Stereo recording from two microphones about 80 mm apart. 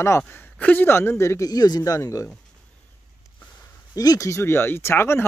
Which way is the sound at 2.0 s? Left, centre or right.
Left.